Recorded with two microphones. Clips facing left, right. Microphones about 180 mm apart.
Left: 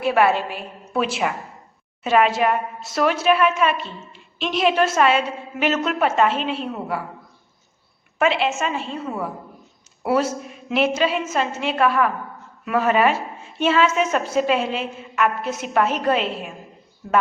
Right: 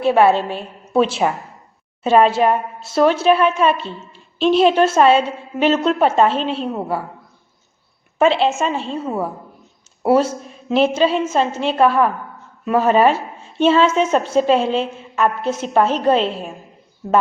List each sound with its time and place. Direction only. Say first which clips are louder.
0.0 s a woman's voice: right 5 dB; 30° right (ahead or behind)
8.2 s a woman's voice: right 5 dB; 30° right (ahead or behind)